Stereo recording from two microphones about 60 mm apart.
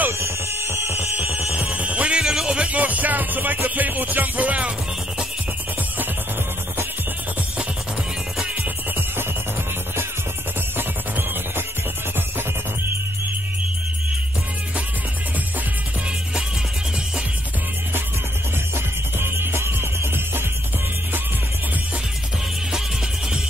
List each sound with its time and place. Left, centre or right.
0.2 s music: right
0.9 s music: right; by 2.6 s centre
2.6 s music: right
10.8 s music: right
19.1 s music: right